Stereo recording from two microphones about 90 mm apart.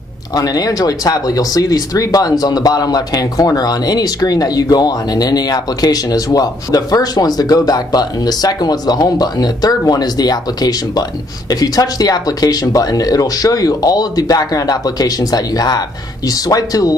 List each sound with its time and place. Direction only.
0.4 s speech: 40° left (ahead or behind)